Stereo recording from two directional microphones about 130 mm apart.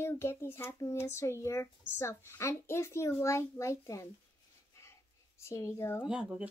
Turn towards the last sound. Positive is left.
turn(degrees=-5)  # may be behind; listen again after turning